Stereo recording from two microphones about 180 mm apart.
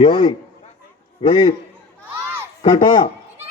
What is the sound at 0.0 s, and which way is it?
Speech, 35° left (ahead or behind).